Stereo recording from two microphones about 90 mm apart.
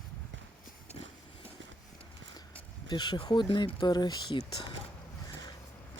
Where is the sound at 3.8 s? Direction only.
50° left (ahead or behind).